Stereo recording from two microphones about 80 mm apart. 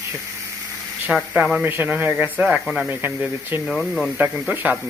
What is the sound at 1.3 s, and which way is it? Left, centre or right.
Speech, centre.